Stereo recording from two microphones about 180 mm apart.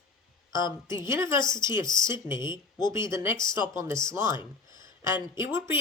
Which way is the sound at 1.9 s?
25° left (ahead or behind).